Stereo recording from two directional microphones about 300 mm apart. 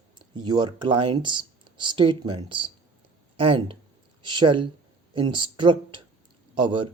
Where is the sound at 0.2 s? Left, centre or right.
Centre.